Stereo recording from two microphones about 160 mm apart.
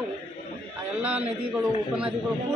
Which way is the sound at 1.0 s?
10° right (ahead or behind).